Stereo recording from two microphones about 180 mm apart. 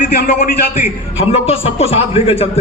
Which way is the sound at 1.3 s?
35° left (ahead or behind).